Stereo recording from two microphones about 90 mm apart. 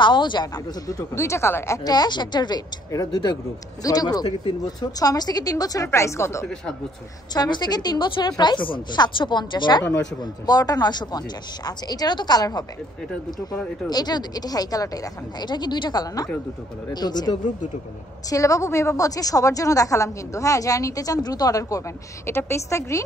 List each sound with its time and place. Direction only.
0.0 s a woman's voice: 60° left (ahead or behind)
0.8 s a woman's voice: 35° left (ahead or behind)
1.9 s a woman's voice: 50° left (ahead or behind)
5.9 s a woman's voice: 30° left (ahead or behind)
7.3 s a woman's voice: 55° left (ahead or behind)
10.4 s a woman's voice: 45° left (ahead or behind)
13.8 s a woman's voice: 50° left (ahead or behind)
15.4 s a woman's voice: 55° left (ahead or behind)
18.3 s a woman's voice: 35° left (ahead or behind)
22.3 s a woman's voice: 30° left (ahead or behind)